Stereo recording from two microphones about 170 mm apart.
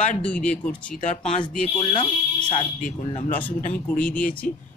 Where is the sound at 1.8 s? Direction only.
30° left (ahead or behind).